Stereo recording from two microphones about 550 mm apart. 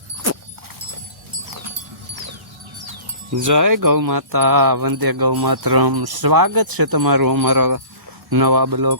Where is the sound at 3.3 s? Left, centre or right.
Right.